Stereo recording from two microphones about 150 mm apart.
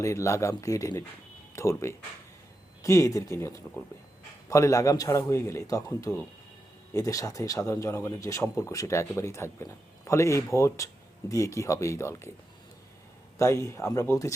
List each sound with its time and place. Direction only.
0.0 s speech: 20° left (ahead or behind)
13.4 s speech: 20° left (ahead or behind)